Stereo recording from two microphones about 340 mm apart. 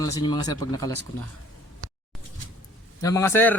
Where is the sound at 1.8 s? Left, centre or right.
Right.